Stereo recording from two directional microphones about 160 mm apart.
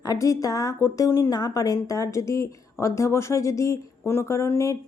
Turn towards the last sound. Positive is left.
turn(degrees=15)  # may be behind; listen again after turning